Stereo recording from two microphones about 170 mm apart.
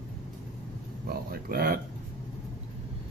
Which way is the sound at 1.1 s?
60° right (ahead or behind).